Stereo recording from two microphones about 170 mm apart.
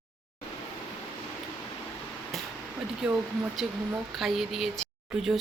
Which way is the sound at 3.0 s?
5° right (ahead or behind).